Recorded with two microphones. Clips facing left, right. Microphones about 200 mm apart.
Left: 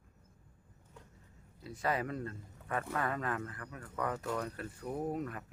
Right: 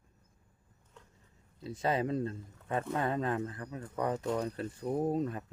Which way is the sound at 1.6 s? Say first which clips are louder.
Right 4 dB; 25° right (ahead or behind).